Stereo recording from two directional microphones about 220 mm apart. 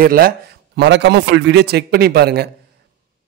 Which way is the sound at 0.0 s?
40° right (ahead or behind).